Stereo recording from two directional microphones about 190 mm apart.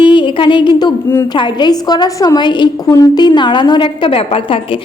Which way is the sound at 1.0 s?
10° left (ahead or behind).